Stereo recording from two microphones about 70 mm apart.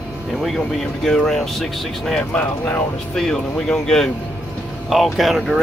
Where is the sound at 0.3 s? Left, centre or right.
Centre.